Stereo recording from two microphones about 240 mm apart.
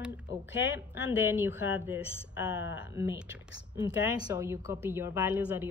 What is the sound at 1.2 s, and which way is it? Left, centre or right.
Speech, centre.